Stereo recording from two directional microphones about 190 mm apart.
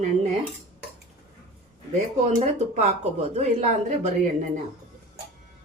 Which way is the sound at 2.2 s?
35° right (ahead or behind).